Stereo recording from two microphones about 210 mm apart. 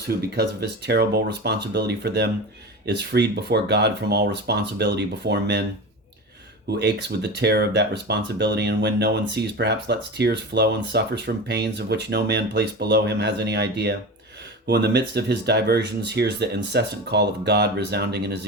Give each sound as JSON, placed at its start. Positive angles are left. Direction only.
{"t": 0.2, "sound": "speech", "side_deg": -50}
{"t": 6.7, "sound": "speech", "side_deg": -55}